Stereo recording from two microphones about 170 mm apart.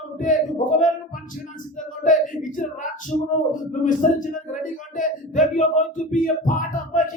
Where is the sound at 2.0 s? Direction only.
50° left (ahead or behind).